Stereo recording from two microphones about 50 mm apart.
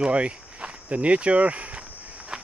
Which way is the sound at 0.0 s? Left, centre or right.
Right.